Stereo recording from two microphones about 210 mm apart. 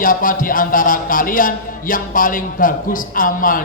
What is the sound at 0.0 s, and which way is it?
A man's voice, 40° left (ahead or behind).